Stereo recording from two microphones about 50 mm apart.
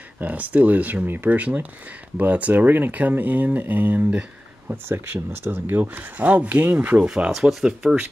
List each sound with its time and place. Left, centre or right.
0.2 s speech: right
1.4 s speech: right
4.6 s speech: right
7.1 s speech: centre